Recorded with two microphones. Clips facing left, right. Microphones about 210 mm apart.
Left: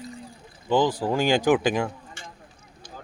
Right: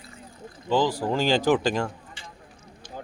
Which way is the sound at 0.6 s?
20° left (ahead or behind).